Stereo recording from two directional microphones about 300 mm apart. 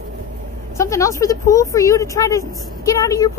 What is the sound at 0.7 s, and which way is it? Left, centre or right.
Speech, centre.